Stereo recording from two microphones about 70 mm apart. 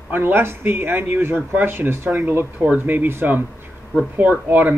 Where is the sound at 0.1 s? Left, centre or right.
Right.